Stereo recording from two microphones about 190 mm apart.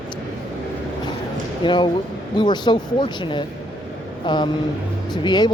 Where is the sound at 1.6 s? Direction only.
25° left (ahead or behind).